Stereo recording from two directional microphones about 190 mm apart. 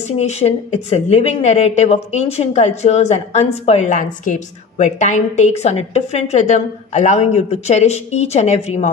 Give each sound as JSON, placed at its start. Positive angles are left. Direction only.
{"t": 0.2, "sound": "a woman's voice", "side_deg": 35}